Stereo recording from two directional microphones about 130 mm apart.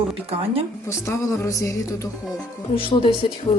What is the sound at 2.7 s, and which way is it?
Speech, 40° left (ahead or behind).